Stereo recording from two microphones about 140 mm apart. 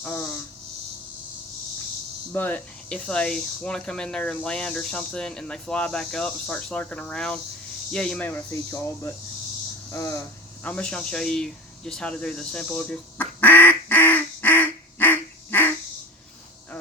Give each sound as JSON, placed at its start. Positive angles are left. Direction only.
{"t": 0.0, "sound": "speech", "side_deg": 10}
{"t": 2.3, "sound": "speech", "side_deg": 15}
{"t": 10.6, "sound": "a sound", "side_deg": 10}